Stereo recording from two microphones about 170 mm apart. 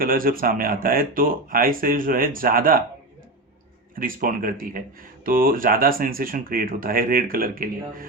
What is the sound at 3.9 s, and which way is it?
Speech, 55° right (ahead or behind).